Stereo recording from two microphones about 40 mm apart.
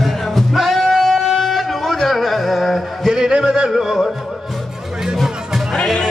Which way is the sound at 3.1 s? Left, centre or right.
Centre.